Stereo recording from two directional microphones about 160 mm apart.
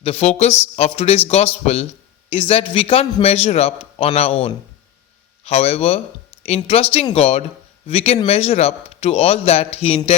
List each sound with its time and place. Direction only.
0.0 s a man's voice: 40° left (ahead or behind)